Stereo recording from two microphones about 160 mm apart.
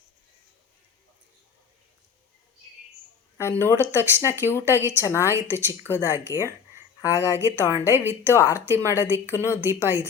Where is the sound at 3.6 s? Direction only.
15° left (ahead or behind).